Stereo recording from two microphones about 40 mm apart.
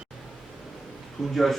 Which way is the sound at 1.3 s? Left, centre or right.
Centre.